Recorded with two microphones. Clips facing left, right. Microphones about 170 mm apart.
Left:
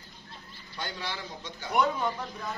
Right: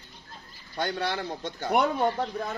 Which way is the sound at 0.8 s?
60° right (ahead or behind).